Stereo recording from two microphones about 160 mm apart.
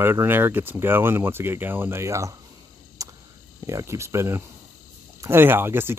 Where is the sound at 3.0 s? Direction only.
20° right (ahead or behind).